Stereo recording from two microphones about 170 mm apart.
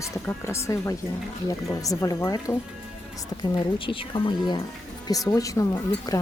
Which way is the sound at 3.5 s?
30° left (ahead or behind).